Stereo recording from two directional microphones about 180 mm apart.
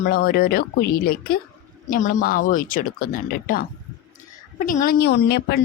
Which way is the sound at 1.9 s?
45° left (ahead or behind).